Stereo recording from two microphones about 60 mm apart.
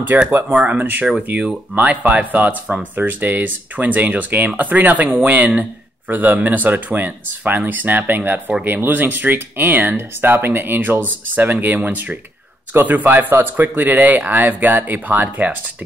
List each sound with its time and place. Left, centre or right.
0.1 s speech: right